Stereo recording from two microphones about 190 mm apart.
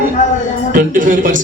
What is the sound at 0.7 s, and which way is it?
Speech, 45° right (ahead or behind).